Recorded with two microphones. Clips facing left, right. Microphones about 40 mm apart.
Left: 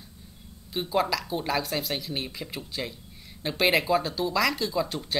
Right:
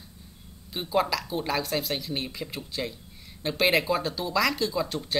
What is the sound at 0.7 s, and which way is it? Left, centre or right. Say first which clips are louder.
Speech: even; centre.